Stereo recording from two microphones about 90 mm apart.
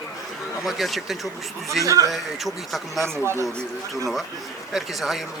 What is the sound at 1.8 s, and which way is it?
Speech, 40° right (ahead or behind).